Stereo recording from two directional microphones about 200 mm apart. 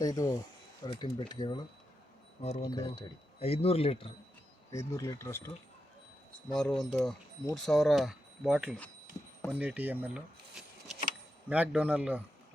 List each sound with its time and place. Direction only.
0.0 s speech: 20° left (ahead or behind)
2.4 s speech: 35° left (ahead or behind)
2.6 s speech: 15° left (ahead or behind)
3.4 s speech: 30° left (ahead or behind)
4.7 s speech: 15° left (ahead or behind)
6.3 s a man's voice: centre (ahead or behind)